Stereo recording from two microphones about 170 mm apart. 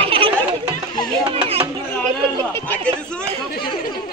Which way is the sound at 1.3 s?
35° right (ahead or behind).